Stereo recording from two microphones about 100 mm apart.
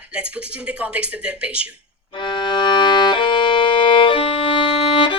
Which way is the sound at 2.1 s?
50° left (ahead or behind).